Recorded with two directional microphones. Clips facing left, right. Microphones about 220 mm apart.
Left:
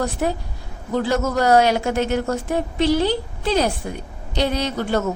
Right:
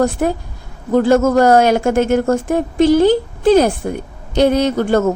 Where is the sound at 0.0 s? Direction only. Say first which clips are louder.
Right 7 dB; 50° right (ahead or behind).